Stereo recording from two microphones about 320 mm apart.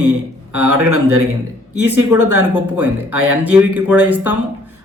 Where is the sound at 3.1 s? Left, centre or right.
Right.